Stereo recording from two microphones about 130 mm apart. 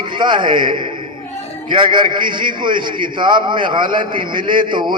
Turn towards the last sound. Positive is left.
turn(degrees=-35)  # may be behind; listen again after turning